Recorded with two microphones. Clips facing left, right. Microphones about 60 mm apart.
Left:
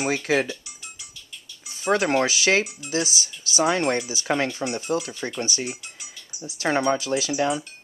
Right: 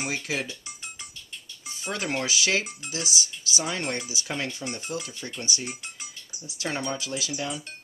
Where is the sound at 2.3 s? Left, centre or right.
Left.